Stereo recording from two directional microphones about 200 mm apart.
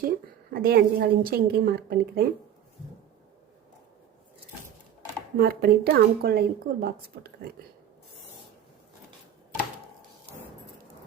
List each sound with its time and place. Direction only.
0.0 s a woman's voice: 45° right (ahead or behind)
5.4 s a woman's voice: 50° right (ahead or behind)